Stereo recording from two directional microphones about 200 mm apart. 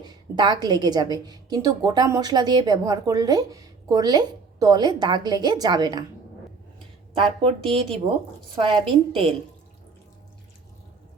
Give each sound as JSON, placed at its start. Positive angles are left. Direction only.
{"t": 0.0, "sound": "a woman's voice", "side_deg": -20}
{"t": 6.7, "sound": "a sound", "side_deg": -25}
{"t": 7.7, "sound": "a woman's voice", "side_deg": -25}